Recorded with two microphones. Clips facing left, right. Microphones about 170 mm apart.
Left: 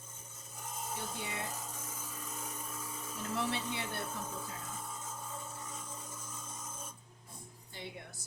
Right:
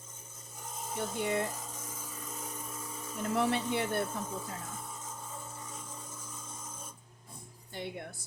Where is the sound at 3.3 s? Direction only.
55° right (ahead or behind).